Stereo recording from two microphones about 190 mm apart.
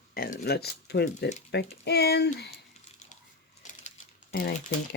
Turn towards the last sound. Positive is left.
turn(degrees=55)  # may be behind; listen again after turning